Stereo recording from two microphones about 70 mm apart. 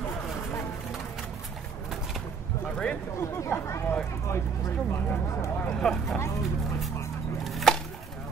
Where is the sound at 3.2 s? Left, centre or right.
Left.